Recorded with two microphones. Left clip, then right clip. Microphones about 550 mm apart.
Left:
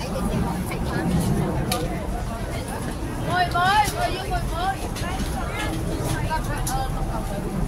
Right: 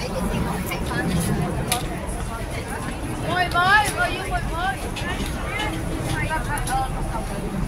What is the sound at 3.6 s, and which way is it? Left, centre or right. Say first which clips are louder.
Vehicle: right 2 dB; left.